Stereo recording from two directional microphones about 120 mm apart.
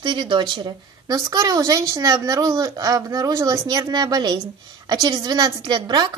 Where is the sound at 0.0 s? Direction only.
40° right (ahead or behind).